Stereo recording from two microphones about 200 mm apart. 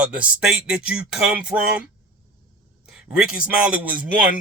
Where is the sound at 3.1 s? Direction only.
5° right (ahead or behind).